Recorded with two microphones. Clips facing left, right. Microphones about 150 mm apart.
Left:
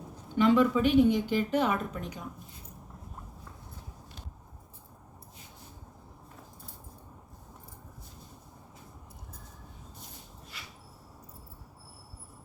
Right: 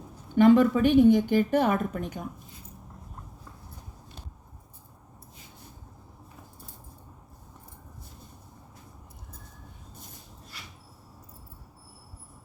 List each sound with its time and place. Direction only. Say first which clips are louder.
0.3 s a woman's voice: right 5 dB; 50° right (ahead or behind)